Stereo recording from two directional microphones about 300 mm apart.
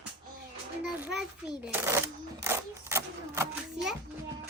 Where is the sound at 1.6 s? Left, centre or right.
Centre.